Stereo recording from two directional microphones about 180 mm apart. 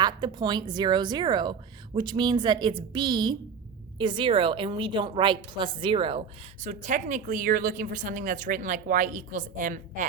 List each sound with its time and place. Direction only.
0.0 s a woman's voice: 25° right (ahead or behind); by 10.1 s 45° right (ahead or behind)